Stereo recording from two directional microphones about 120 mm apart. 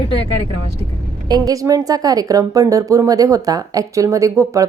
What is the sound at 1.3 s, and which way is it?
A woman's voice, 30° right (ahead or behind).